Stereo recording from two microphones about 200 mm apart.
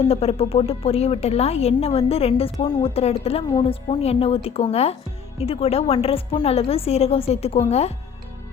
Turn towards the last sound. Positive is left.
turn(degrees=30)  # may be behind; listen again after turning